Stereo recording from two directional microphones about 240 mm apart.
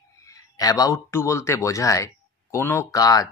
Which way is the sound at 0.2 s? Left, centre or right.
Centre.